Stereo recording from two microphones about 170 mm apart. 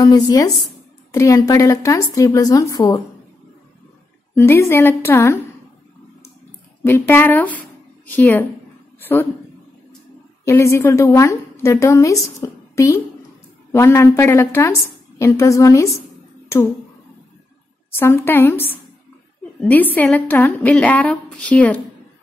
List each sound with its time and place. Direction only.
0.0 s a woman's voice: 20° left (ahead or behind)
4.4 s a woman's voice: 15° left (ahead or behind)
6.8 s a woman's voice: 10° left (ahead or behind)
10.4 s a woman's voice: 15° left (ahead or behind)
16.4 s a sound: 15° left (ahead or behind)
17.9 s a woman's voice: 15° left (ahead or behind)